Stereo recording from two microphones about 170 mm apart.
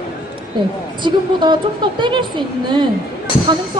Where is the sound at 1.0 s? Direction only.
25° right (ahead or behind).